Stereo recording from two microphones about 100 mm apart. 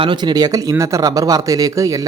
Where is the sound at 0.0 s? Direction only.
50° right (ahead or behind).